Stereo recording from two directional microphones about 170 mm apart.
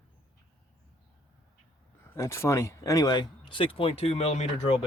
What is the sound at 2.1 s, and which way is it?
Speech, 15° left (ahead or behind).